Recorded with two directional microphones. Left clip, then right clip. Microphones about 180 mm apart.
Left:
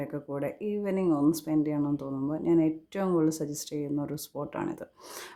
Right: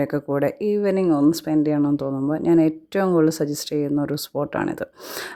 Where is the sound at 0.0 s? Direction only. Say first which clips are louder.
Right 12 dB; 50° right (ahead or behind).